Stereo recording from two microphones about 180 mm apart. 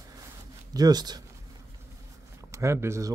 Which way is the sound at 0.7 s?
20° right (ahead or behind).